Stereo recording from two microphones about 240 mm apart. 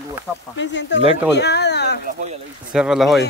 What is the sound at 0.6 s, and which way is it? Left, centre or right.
Speech, left.